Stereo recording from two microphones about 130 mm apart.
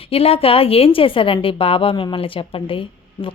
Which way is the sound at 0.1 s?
50° left (ahead or behind).